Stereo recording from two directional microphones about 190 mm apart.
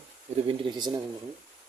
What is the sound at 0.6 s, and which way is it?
Speech, 20° right (ahead or behind).